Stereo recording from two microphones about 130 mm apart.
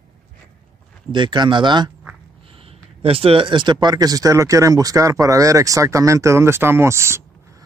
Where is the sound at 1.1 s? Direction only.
35° right (ahead or behind).